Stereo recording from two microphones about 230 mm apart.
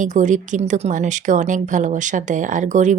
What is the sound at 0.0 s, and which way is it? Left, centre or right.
Speech, right.